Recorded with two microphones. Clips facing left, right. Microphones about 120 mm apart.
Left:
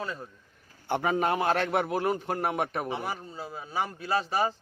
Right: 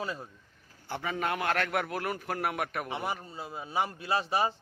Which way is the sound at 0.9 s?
55° left (ahead or behind).